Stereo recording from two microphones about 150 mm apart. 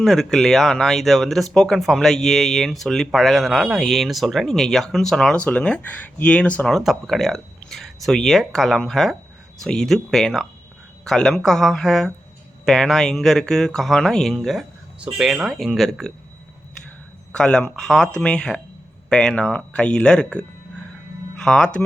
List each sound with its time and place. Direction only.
0.0 s speech: centre (ahead or behind)
17.3 s speech: 5° left (ahead or behind)